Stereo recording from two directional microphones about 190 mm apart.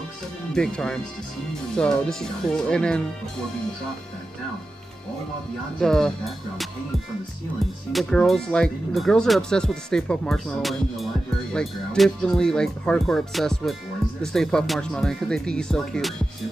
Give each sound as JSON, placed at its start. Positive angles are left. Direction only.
{"t": 0.6, "sound": "speech", "side_deg": 5}
{"t": 5.8, "sound": "speech", "side_deg": 5}
{"t": 7.9, "sound": "speech", "side_deg": 0}